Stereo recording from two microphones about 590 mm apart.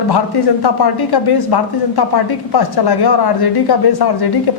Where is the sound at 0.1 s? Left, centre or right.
Left.